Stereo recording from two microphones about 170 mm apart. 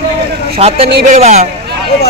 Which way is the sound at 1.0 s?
45° right (ahead or behind).